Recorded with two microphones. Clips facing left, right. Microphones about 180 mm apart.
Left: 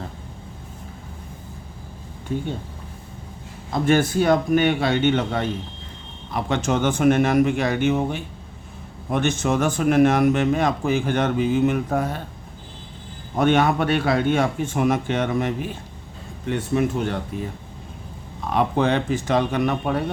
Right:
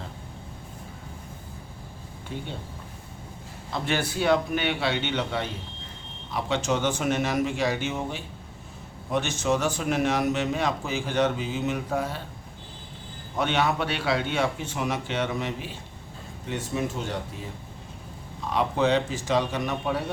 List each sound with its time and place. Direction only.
2.3 s speech: 45° left (ahead or behind)
3.7 s speech: 45° left (ahead or behind)
13.3 s speech: 50° left (ahead or behind)
16.5 s speech: 60° left (ahead or behind)
18.5 s speech: 55° left (ahead or behind)